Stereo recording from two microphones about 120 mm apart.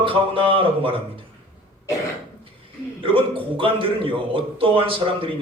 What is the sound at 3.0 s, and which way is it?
A man's voice, 45° right (ahead or behind).